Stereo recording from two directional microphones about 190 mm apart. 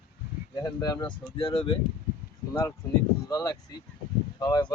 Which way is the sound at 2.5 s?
15° left (ahead or behind).